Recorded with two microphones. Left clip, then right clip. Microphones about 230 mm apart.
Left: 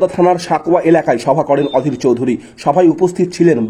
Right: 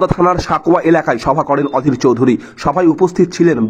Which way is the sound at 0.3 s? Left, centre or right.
Centre.